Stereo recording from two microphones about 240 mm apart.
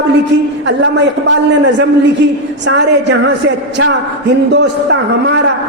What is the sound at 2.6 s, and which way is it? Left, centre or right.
Speech, right.